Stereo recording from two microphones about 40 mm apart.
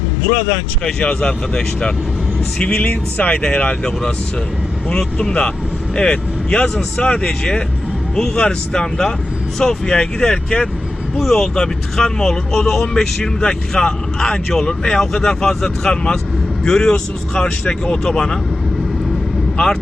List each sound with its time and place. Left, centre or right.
0.3 s speech: left
0.9 s speech: left
2.6 s speech: left
5.1 s speech: left
6.0 s speech: left
11.2 s speech: centre